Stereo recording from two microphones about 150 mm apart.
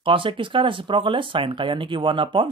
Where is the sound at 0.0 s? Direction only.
35° right (ahead or behind).